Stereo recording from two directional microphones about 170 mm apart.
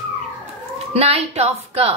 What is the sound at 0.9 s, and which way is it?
A woman's voice, 35° right (ahead or behind).